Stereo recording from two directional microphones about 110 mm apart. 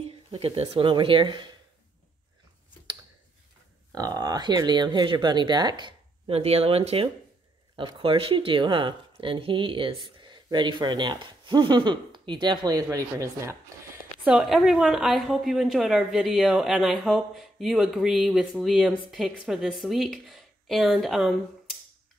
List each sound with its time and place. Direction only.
0.3 s speech: 65° right (ahead or behind); by 1.5 s 45° right (ahead or behind)
3.9 s speech: 35° right (ahead or behind)
6.3 s speech: 70° right (ahead or behind)
7.7 s speech: 50° right (ahead or behind); by 13.6 s 30° right (ahead or behind)
14.2 s a woman's voice: 5° right (ahead or behind)